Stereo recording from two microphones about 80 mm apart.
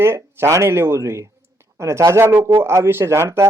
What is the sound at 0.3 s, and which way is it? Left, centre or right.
Speech, right.